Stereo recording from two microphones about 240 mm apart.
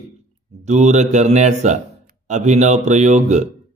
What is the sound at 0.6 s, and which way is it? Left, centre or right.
Speech, right.